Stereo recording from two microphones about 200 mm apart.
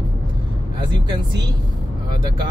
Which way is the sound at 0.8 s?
20° right (ahead or behind).